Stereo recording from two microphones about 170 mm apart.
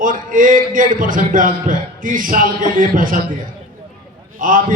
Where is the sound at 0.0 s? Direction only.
50° right (ahead or behind).